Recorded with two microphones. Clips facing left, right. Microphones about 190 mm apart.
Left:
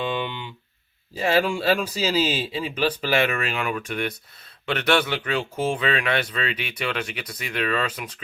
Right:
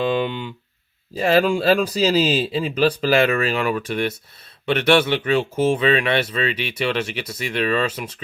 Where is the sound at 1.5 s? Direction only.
40° right (ahead or behind).